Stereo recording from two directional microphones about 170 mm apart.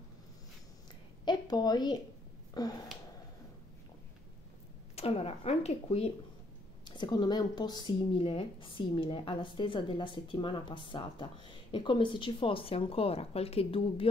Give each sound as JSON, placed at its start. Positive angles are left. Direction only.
{"t": 1.2, "sound": "a woman's voice", "side_deg": 25}
{"t": 4.9, "sound": "speech", "side_deg": 35}
{"t": 7.0, "sound": "a woman's voice", "side_deg": 25}